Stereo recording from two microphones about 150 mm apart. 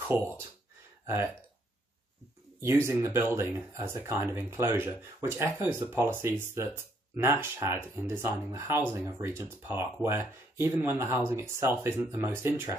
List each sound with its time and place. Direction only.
0.1 s speech: 15° right (ahead or behind)
2.6 s speech: 20° right (ahead or behind)